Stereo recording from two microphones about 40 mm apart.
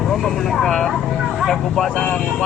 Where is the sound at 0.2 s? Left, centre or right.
Centre.